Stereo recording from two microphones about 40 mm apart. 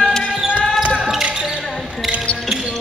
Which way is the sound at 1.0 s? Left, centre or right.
Centre.